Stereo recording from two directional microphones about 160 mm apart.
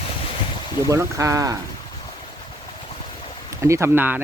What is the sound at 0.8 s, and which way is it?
Speech, 20° right (ahead or behind).